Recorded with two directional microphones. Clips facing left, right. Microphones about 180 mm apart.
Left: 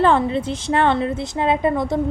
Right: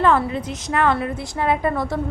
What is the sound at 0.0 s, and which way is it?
A woman's voice, 30° left (ahead or behind).